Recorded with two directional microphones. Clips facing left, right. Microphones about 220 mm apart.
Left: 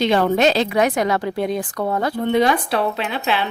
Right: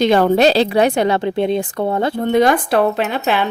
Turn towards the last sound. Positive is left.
turn(degrees=-45)  # may be behind; listen again after turning